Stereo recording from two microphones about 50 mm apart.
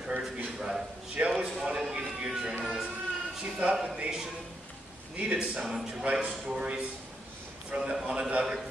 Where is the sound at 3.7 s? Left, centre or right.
Centre.